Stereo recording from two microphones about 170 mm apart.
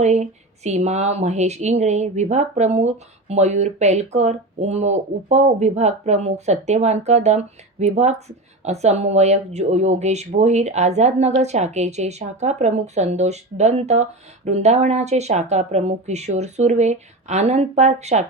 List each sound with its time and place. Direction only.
0.0 s speech: 40° right (ahead or behind)